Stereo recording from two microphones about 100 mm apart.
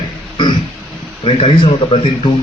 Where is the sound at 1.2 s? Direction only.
70° left (ahead or behind).